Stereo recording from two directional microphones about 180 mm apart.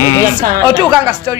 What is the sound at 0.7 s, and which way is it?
Speech, 25° right (ahead or behind).